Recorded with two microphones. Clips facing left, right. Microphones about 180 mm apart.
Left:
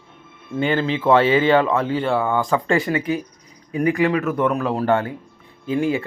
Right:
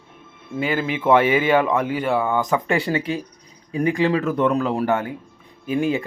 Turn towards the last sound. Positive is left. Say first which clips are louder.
# left 1 dB
turn(degrees=-20)  # may be behind; listen again after turning